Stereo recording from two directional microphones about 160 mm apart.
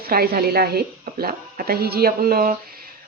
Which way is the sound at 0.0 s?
70° right (ahead or behind).